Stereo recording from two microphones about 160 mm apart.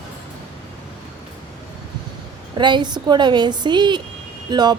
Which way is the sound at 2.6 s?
30° right (ahead or behind).